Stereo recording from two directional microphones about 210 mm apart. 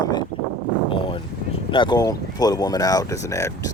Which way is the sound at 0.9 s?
25° left (ahead or behind).